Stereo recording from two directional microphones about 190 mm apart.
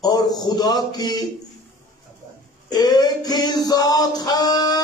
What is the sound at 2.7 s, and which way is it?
Music, 20° left (ahead or behind).